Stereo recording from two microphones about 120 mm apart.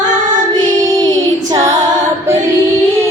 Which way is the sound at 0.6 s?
90° right.